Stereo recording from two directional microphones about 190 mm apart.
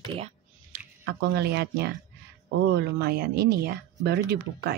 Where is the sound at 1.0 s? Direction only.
60° right (ahead or behind).